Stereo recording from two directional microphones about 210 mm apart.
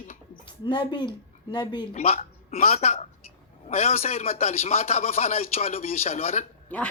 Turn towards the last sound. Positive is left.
turn(degrees=5)  # may be behind; listen again after turning